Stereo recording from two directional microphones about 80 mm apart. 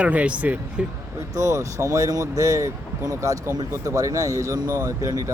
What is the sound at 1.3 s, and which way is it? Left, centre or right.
Speech, right.